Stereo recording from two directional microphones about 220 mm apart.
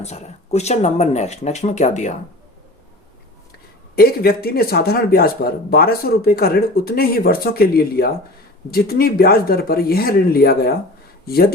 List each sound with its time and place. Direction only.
0.0 s speech: 30° left (ahead or behind)
3.9 s speech: 45° left (ahead or behind)